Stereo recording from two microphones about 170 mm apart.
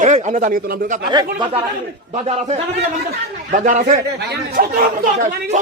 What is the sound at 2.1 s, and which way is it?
A man's voice, 40° right (ahead or behind).